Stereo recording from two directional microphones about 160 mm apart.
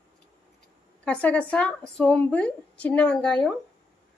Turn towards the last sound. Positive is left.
turn(degrees=5)  # may be behind; listen again after turning